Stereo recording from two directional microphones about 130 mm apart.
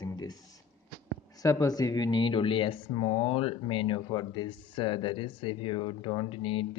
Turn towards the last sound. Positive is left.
turn(degrees=45)  # may be behind; listen again after turning